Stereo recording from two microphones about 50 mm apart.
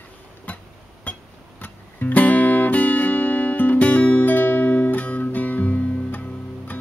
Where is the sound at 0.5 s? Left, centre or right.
Left.